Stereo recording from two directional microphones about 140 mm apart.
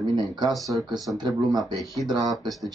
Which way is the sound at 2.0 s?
30° right (ahead or behind).